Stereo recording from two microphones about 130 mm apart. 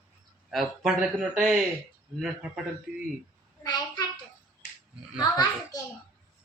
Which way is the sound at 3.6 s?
30° left (ahead or behind).